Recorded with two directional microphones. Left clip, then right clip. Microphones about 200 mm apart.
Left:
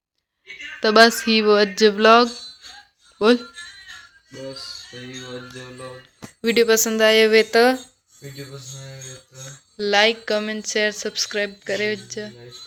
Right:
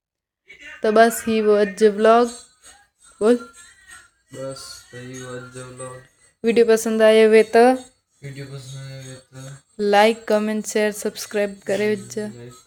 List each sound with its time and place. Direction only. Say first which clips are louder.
0.8 s speech: left 1 dB; 10° right (ahead or behind)
6.4 s speech: right 1 dB; 10° right (ahead or behind)
9.5 s a woman's voice: right 3 dB; 25° right (ahead or behind)